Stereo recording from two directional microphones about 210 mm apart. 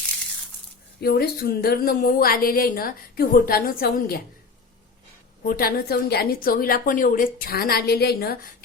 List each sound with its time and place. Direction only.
1.0 s a woman's voice: 50° left (ahead or behind)
5.5 s a woman's voice: 45° left (ahead or behind)